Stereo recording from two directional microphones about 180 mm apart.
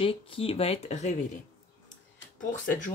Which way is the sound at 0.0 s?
30° left (ahead or behind).